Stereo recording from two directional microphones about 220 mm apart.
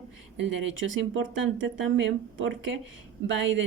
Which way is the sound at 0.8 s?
60° right (ahead or behind).